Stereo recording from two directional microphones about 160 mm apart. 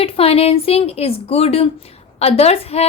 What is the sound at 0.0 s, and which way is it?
A woman's voice, 40° left (ahead or behind).